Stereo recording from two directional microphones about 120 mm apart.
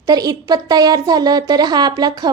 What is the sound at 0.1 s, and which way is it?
A woman's voice, 35° right (ahead or behind).